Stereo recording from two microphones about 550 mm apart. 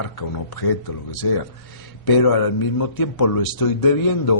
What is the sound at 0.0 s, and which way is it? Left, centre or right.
A man's voice, left.